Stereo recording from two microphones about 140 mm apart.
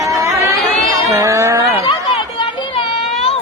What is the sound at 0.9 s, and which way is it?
Music, 20° right (ahead or behind).